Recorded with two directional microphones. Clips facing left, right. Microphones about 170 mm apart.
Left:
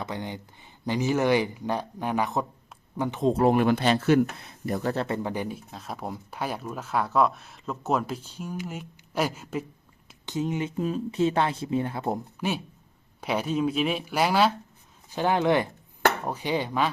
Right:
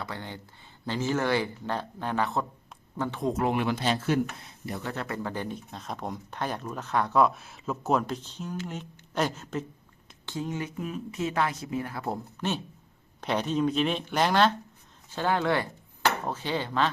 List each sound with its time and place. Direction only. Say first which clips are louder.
0.0 s speech: left 4 dB; 15° left (ahead or behind)
3.4 s speech: left 6 dB; 45° left (ahead or behind); by 4.2 s 65° left (ahead or behind)
4.6 s speech: left 7 dB; 45° left (ahead or behind)
5.0 s speech: left 3 dB; 20° left (ahead or behind)
12.4 s speech: left 2 dB; 10° left (ahead or behind)